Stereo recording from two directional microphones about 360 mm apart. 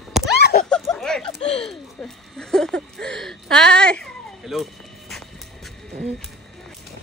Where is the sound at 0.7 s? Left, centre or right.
Centre.